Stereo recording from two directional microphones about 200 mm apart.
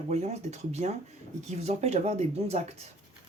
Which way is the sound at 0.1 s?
35° right (ahead or behind).